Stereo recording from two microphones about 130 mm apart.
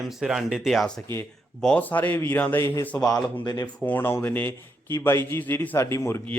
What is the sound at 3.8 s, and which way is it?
A man's voice, 15° left (ahead or behind).